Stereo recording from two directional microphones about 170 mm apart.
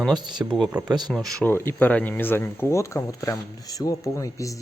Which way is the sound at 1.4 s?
15° left (ahead or behind).